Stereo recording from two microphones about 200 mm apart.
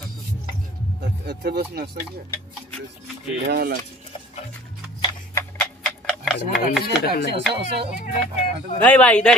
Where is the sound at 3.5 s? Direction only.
50° right (ahead or behind).